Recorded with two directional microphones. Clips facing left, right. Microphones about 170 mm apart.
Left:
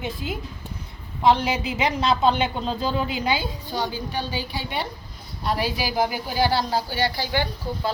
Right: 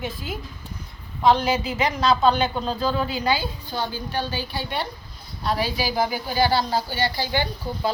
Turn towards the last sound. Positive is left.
turn(degrees=0)  # may be behind; listen again after turning